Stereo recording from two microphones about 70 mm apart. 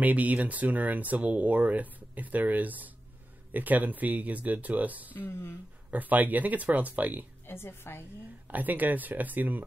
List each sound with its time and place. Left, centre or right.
0.0 s speech: right
5.1 s speech: left
5.9 s speech: right
7.4 s speech: left
8.5 s speech: right